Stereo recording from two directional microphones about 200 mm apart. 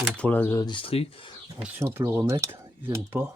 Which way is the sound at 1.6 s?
10° right (ahead or behind).